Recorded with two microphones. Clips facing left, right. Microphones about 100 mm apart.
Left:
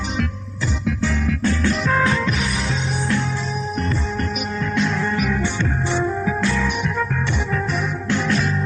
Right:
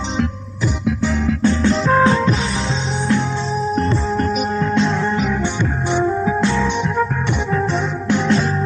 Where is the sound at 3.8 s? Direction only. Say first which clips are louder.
Right 4 dB; 35° right (ahead or behind).